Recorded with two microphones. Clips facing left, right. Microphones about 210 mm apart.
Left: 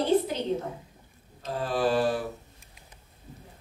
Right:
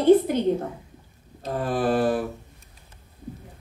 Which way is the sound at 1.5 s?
55° right (ahead or behind).